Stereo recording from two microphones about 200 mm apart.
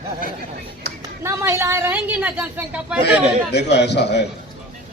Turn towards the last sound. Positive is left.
turn(degrees=55)  # may be behind; listen again after turning